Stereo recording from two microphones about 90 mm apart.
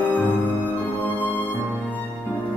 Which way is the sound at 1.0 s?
20° left (ahead or behind).